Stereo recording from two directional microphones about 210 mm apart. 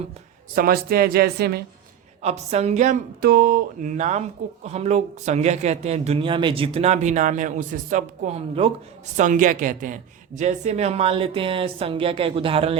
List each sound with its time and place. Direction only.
0.5 s a woman's voice: 45° right (ahead or behind)
2.2 s a woman's voice: 30° right (ahead or behind)